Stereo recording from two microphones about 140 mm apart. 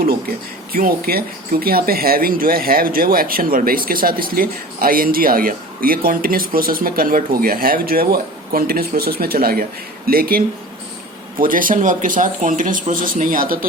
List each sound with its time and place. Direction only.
0.7 s speech: 90° right
11.3 s speech: 80° right